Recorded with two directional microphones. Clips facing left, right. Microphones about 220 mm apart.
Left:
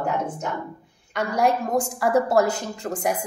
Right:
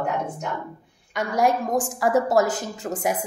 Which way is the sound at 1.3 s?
Centre (ahead or behind).